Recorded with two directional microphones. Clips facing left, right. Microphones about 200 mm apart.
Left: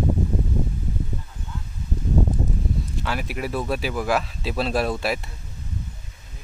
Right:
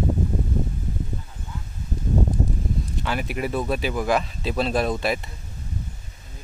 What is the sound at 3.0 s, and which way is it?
Speech, centre (ahead or behind).